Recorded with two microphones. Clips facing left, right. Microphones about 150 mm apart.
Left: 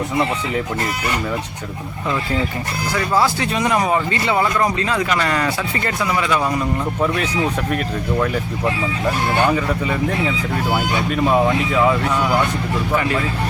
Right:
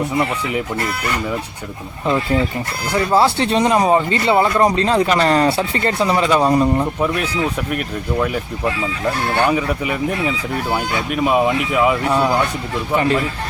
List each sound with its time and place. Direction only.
0.8 s speech: 15° left (ahead or behind)
2.0 s speech: 25° right (ahead or behind)
7.7 s speech: 5° right (ahead or behind)
9.5 s speech: 10° right (ahead or behind)
12.9 s speech: 30° right (ahead or behind)